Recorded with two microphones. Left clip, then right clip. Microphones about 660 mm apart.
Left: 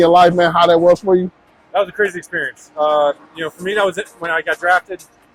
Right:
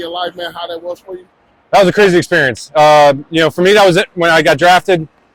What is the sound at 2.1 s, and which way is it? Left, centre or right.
Speech, right.